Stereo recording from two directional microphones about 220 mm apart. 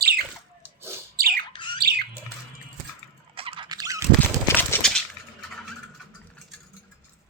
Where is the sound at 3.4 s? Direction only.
25° right (ahead or behind).